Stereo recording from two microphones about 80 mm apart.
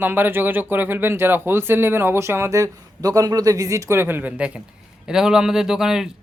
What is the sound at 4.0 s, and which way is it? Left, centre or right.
Speech, right.